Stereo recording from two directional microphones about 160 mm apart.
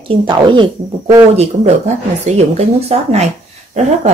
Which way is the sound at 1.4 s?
45° right (ahead or behind).